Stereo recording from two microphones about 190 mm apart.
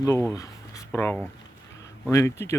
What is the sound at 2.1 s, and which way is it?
Speech, 15° left (ahead or behind).